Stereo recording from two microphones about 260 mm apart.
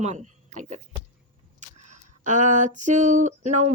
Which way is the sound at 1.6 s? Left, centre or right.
Right.